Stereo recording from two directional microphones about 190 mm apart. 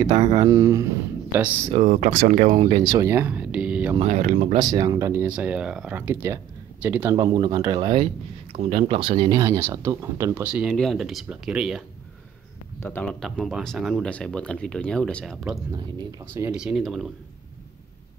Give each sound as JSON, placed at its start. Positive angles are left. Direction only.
{"t": 0.1, "sound": "speech", "side_deg": -30}
{"t": 0.5, "sound": "speech", "side_deg": -15}
{"t": 1.7, "sound": "speech", "side_deg": -40}
{"t": 2.9, "sound": "speech", "side_deg": -15}
{"t": 4.0, "sound": "speech", "side_deg": -40}
{"t": 4.6, "sound": "speech", "side_deg": -20}
{"t": 7.2, "sound": "speech", "side_deg": -25}
{"t": 12.8, "sound": "speech", "side_deg": 5}
{"t": 15.7, "sound": "speech", "side_deg": -15}
{"t": 16.5, "sound": "speech", "side_deg": -5}